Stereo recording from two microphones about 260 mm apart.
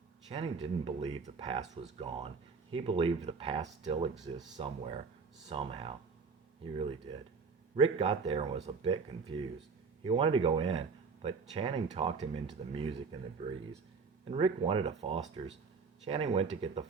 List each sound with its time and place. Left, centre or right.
0.3 s speech: right
4.1 s speech: centre
4.5 s speech: right
7.8 s speech: right
14.3 s speech: right